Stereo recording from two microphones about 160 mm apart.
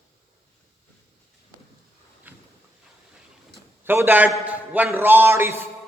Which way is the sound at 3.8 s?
15° right (ahead or behind).